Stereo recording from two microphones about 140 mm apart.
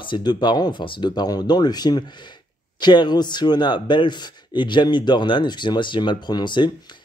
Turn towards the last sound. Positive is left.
turn(degrees=35)  # may be behind; listen again after turning